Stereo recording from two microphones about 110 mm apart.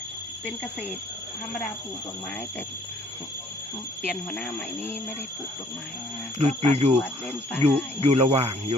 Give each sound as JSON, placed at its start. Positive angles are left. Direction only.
{"t": 0.4, "sound": "speech", "side_deg": 5}
{"t": 4.1, "sound": "speech", "side_deg": 5}
{"t": 6.4, "sound": "speech", "side_deg": -70}
{"t": 7.0, "sound": "speech", "side_deg": 10}
{"t": 7.6, "sound": "speech", "side_deg": -70}